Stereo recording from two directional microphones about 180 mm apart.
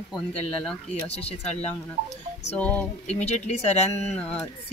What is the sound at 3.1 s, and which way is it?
Speech, 40° left (ahead or behind).